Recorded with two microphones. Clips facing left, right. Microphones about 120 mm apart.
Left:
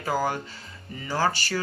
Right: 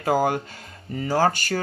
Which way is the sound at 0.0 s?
50° right (ahead or behind).